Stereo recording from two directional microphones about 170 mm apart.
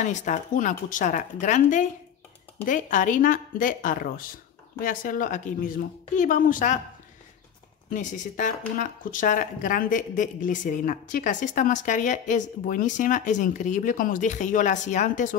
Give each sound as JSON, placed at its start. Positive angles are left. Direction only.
{"t": 0.0, "sound": "speech", "side_deg": 45}
{"t": 7.9, "sound": "speech", "side_deg": 50}